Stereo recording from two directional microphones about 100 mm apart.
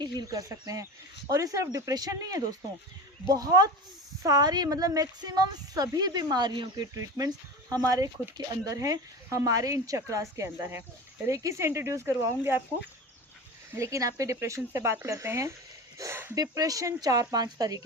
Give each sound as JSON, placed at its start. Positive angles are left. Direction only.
{"t": 0.0, "sound": "a woman's voice", "side_deg": -40}
{"t": 7.2, "sound": "speech", "side_deg": -35}
{"t": 13.7, "sound": "speech", "side_deg": -30}
{"t": 16.0, "sound": "a sound", "side_deg": -25}
{"t": 16.3, "sound": "speech", "side_deg": -35}